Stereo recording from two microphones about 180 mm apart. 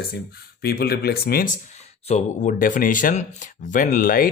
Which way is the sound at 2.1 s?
45° left (ahead or behind).